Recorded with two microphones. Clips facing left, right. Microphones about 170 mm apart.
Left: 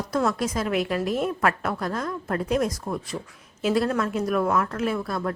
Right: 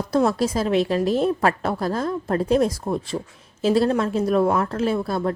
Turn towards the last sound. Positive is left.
turn(degrees=-30)  # may be behind; listen again after turning